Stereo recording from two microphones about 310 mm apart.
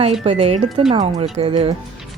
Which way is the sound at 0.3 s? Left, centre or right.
Centre.